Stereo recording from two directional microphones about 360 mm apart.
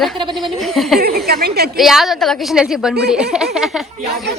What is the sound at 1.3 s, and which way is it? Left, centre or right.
Speech, right.